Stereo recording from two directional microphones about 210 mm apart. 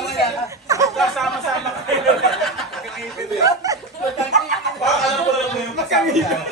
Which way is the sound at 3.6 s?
15° right (ahead or behind).